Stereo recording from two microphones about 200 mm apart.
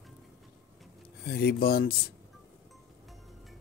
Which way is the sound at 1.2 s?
50° left (ahead or behind).